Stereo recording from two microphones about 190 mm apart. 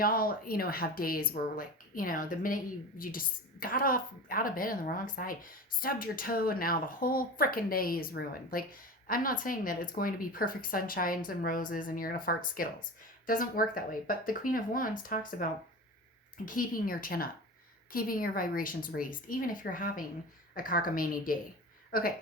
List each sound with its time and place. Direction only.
0.0 s speech: 50° left (ahead or behind)
16.5 s speech: 45° left (ahead or behind)